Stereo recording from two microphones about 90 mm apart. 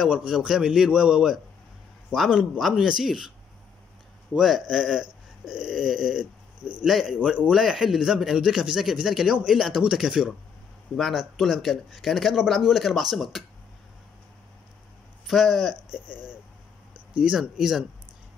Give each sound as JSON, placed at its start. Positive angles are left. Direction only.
{"t": 0.0, "sound": "a man's voice", "side_deg": -10}
{"t": 15.2, "sound": "speech", "side_deg": 0}
{"t": 17.2, "sound": "speech", "side_deg": -5}